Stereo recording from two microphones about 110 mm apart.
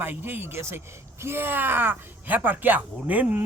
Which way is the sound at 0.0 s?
20° right (ahead or behind).